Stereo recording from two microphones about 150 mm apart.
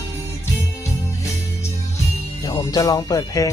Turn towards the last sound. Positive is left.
turn(degrees=25)  # may be behind; listen again after turning